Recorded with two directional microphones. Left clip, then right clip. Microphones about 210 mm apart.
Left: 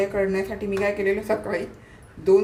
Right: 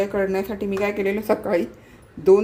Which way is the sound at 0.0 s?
40° right (ahead or behind).